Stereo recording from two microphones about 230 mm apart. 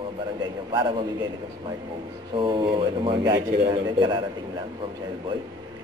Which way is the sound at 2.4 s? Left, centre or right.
Right.